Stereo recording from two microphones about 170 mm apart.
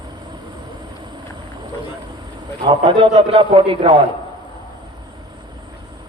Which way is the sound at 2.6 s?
25° right (ahead or behind).